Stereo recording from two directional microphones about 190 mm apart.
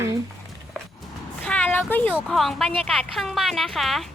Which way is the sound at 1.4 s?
10° left (ahead or behind).